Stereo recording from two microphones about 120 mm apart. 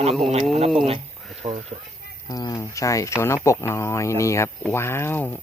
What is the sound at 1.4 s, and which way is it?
Speech, 60° right (ahead or behind).